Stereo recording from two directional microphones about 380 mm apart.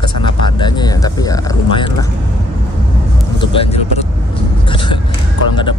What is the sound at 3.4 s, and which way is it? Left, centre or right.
Speech, centre.